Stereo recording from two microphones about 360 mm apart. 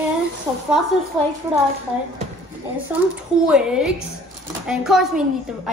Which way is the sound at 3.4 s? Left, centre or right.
Centre.